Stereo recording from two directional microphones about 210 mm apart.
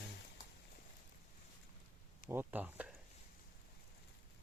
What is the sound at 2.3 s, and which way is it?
Speech, 10° right (ahead or behind).